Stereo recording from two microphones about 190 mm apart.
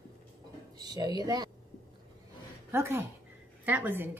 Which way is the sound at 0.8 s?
20° right (ahead or behind).